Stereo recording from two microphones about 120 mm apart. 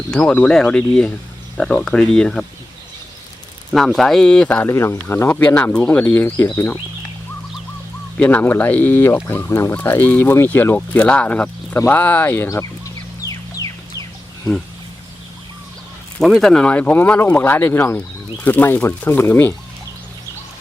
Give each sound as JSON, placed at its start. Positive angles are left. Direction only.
{"t": 0.1, "sound": "speech", "side_deg": 10}
{"t": 3.7, "sound": "speech", "side_deg": 0}
{"t": 4.6, "sound": "speech", "side_deg": 20}
{"t": 8.2, "sound": "speech", "side_deg": 10}
{"t": 13.6, "sound": "music", "side_deg": 30}
{"t": 16.2, "sound": "speech", "side_deg": 5}